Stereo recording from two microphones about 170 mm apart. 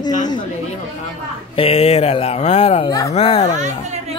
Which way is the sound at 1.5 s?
35° left (ahead or behind).